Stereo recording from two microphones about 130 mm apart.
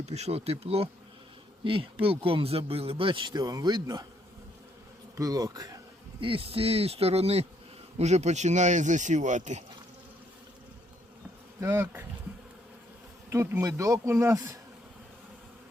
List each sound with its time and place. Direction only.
0.0 s speech: 55° right (ahead or behind); by 4.0 s 30° right (ahead or behind)
5.1 s speech: 30° right (ahead or behind)
6.1 s speech: 45° right (ahead or behind); by 9.6 s 65° right (ahead or behind)
11.6 s speech: 20° right (ahead or behind)
13.3 s speech: 20° right (ahead or behind)